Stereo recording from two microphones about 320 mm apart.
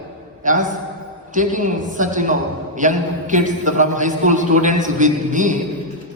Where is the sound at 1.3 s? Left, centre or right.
Right.